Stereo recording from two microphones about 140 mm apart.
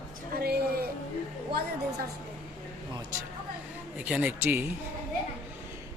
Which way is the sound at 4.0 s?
10° right (ahead or behind).